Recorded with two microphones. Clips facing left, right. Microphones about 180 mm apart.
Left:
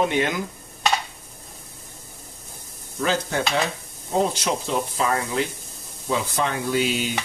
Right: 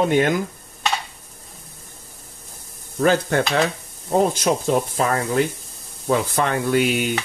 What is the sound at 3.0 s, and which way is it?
Speech, 55° right (ahead or behind).